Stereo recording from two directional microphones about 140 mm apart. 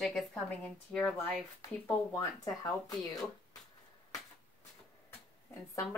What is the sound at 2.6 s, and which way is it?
Speech, 25° left (ahead or behind).